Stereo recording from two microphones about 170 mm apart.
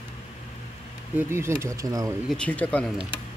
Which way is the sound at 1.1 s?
15° right (ahead or behind).